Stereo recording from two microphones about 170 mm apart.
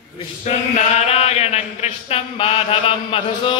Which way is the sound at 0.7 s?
40° left (ahead or behind).